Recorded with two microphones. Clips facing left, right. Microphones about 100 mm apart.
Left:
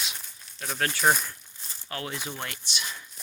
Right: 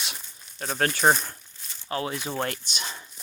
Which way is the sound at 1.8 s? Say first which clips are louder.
Right 6 dB; 25° right (ahead or behind).